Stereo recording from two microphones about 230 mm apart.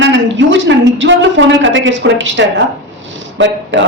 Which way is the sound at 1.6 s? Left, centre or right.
Right.